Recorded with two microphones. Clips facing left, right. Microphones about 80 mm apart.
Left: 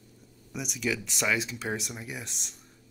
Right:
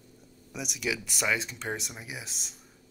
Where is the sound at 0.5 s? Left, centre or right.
Centre.